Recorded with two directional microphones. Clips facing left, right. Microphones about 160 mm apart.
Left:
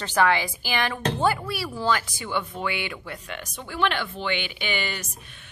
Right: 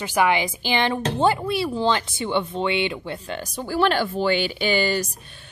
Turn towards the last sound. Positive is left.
turn(degrees=-35)  # may be behind; listen again after turning